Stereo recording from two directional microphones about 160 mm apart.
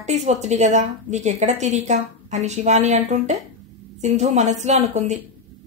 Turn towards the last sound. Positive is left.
turn(degrees=-45)  # may be behind; listen again after turning